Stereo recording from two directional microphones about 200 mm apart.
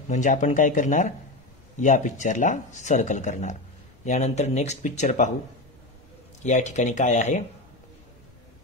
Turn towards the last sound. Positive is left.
turn(degrees=35)  # may be behind; listen again after turning